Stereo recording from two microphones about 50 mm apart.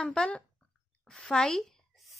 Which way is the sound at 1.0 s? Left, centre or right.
Centre.